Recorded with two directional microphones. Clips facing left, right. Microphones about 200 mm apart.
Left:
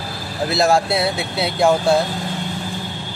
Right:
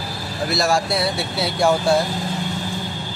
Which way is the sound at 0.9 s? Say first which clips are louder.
Left 2 dB; 20° left (ahead or behind).